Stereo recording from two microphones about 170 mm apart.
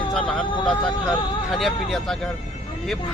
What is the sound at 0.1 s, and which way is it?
Speech, 5° left (ahead or behind).